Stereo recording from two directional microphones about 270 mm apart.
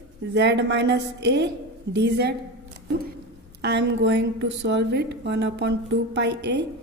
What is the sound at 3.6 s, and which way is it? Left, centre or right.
A woman's voice, right.